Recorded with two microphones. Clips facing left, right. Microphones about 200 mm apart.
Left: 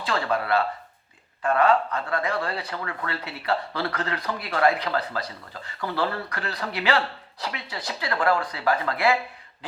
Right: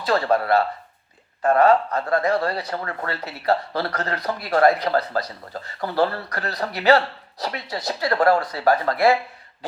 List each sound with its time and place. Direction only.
0.0 s speech: 40° right (ahead or behind)